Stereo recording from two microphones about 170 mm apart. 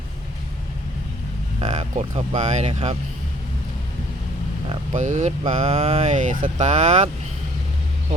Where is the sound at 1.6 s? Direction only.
40° right (ahead or behind).